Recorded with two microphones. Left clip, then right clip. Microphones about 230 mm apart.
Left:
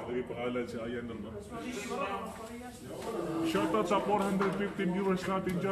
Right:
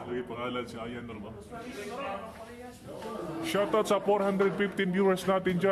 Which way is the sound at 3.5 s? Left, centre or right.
Right.